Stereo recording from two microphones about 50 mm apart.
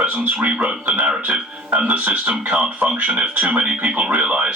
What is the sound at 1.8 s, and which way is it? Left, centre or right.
Speech, right.